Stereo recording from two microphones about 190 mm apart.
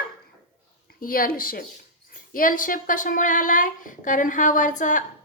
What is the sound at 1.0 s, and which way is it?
Speech, 50° left (ahead or behind).